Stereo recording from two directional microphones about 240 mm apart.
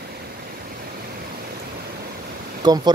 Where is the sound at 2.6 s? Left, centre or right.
Centre.